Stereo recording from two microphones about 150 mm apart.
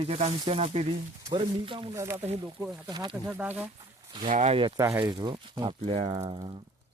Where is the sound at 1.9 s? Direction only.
20° right (ahead or behind).